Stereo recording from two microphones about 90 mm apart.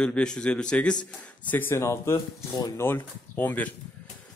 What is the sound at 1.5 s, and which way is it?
Speech, 20° left (ahead or behind).